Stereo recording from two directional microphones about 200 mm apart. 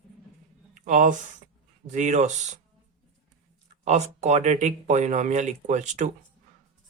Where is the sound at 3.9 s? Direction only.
35° right (ahead or behind).